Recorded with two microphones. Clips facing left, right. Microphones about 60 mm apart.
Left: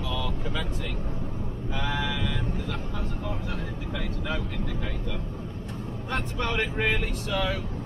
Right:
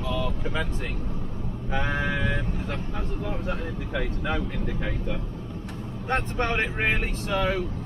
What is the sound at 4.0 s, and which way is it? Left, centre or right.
Speech, right.